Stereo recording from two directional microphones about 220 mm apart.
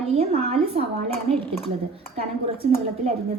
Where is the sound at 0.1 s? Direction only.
30° right (ahead or behind).